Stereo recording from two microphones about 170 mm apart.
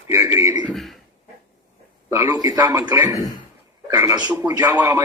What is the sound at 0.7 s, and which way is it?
Speech, centre (ahead or behind).